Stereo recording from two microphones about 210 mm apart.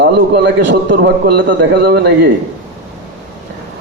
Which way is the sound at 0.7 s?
60° right (ahead or behind).